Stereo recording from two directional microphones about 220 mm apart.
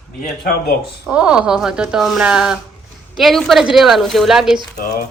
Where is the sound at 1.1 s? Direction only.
5° right (ahead or behind).